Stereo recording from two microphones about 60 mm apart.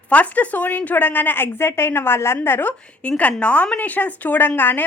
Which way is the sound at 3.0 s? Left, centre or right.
Left.